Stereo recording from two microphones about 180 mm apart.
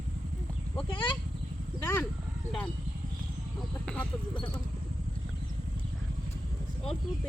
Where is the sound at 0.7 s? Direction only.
25° left (ahead or behind).